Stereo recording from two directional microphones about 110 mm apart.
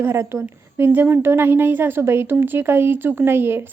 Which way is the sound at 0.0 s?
25° right (ahead or behind).